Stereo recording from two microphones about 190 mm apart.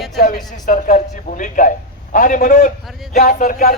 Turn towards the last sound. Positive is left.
turn(degrees=45)  # may be behind; listen again after turning